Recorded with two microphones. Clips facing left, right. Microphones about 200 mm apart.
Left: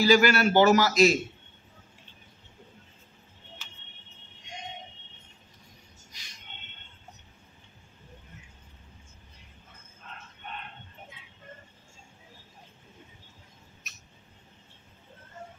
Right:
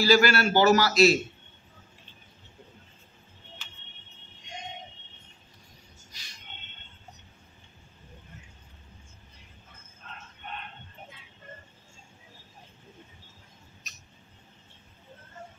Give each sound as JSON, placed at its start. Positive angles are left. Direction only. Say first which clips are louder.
{"t": 0.0, "sound": "a man's voice", "louder": "left 1 dB", "side_deg": 20}